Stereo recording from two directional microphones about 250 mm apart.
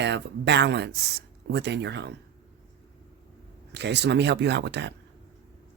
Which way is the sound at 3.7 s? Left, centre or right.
Right.